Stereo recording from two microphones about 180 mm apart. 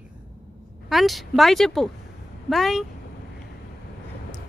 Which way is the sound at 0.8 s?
Centre (ahead or behind).